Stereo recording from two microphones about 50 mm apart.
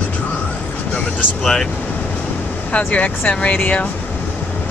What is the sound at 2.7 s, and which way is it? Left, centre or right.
Speech, left.